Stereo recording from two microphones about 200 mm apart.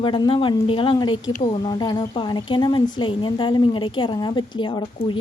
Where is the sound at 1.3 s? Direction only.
35° left (ahead or behind).